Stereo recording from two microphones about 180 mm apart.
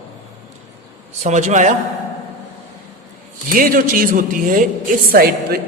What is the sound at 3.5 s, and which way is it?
A man's voice, 50° right (ahead or behind).